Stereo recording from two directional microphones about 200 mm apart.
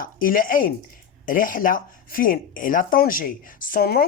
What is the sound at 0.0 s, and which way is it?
Speech, 45° left (ahead or behind).